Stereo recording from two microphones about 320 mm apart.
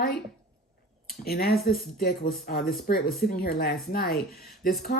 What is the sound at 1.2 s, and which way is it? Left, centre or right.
Speech, left.